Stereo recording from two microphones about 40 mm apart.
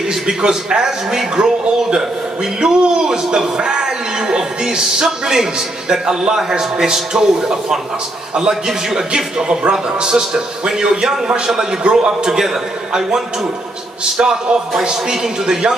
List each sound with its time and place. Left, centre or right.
0.1 s a man's voice: centre
14.1 s a man's voice: centre